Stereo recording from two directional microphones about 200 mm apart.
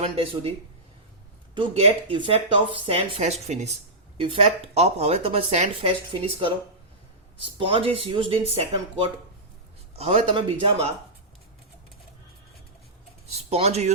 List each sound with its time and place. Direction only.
0.0 s speech: 30° right (ahead or behind)
1.5 s speech: 30° right (ahead or behind)
13.3 s speech: 30° right (ahead or behind)